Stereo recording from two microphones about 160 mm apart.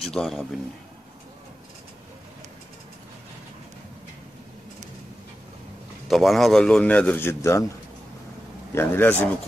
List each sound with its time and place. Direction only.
0.0 s a man's voice: 5° left (ahead or behind)
6.0 s a man's voice: centre (ahead or behind); by 7.7 s 20° left (ahead or behind)
8.7 s a man's voice: 15° left (ahead or behind)